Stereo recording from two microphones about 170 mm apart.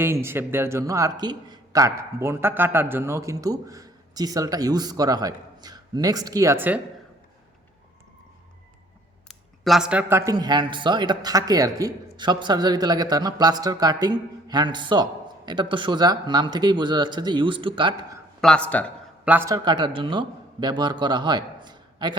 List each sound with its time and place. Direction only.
0.0 s speech: 15° right (ahead or behind)
9.6 s speech: 5° right (ahead or behind); by 17.9 s 30° right (ahead or behind)
18.3 s speech: 5° left (ahead or behind)
19.2 s a man's voice: 10° right (ahead or behind)
19.5 s a man's voice: 25° right (ahead or behind)